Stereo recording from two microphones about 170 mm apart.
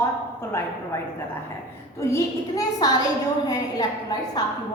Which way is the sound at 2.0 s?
15° left (ahead or behind).